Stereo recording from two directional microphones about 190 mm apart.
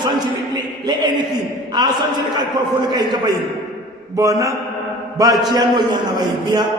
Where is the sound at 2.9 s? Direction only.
20° right (ahead or behind).